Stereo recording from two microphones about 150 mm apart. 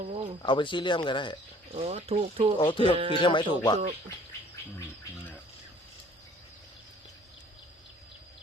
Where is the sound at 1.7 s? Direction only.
45° right (ahead or behind).